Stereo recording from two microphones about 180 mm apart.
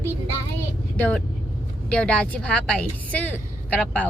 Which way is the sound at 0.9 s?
10° left (ahead or behind).